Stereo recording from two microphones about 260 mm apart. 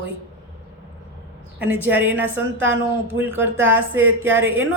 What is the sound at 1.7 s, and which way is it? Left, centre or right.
Speech, centre.